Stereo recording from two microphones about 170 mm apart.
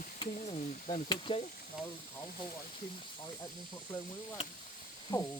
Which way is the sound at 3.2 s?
25° left (ahead or behind).